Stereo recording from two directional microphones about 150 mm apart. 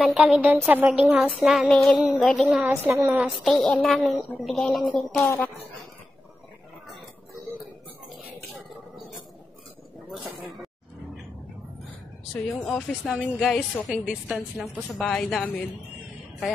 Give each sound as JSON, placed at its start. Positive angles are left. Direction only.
{"t": 0.0, "sound": "child singing", "side_deg": -5}
{"t": 2.7, "sound": "a woman's voice", "side_deg": -20}
{"t": 3.1, "sound": "child singing", "side_deg": -5}
{"t": 4.5, "sound": "a woman's voice", "side_deg": 0}
{"t": 12.6, "sound": "child singing", "side_deg": 5}